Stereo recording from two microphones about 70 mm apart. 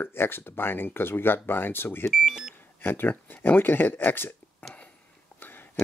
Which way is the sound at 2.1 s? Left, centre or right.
Centre.